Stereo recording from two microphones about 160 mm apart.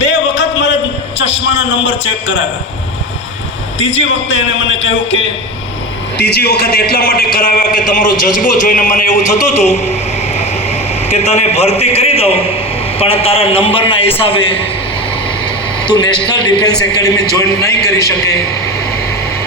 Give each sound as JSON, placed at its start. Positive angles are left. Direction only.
{"t": 0.0, "sound": "a sound", "side_deg": 90}
{"t": 6.1, "sound": "a man's voice", "side_deg": 85}
{"t": 11.1, "sound": "a man's voice", "side_deg": 45}
{"t": 15.9, "sound": "a man's voice", "side_deg": 25}